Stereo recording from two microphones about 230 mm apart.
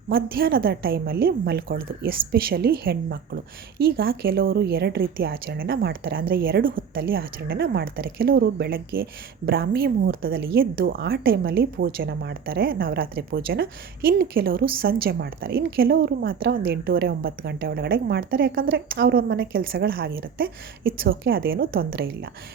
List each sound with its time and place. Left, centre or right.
0.1 s a woman's voice: right